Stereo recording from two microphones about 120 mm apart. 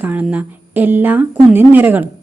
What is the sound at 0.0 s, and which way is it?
A woman's voice, 10° right (ahead or behind).